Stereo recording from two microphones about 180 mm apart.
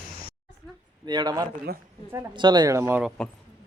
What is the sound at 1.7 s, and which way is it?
Speech, 60° right (ahead or behind).